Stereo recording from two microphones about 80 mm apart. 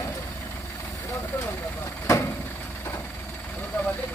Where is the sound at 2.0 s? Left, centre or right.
Left.